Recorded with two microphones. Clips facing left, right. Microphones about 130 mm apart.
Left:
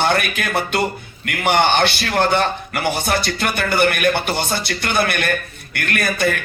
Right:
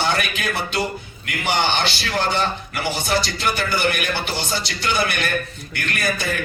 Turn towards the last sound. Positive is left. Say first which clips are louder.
# left 4 dB
turn(degrees=55)  # may be behind; listen again after turning